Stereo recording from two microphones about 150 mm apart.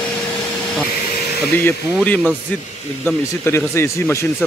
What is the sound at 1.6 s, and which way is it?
Speech, 10° left (ahead or behind).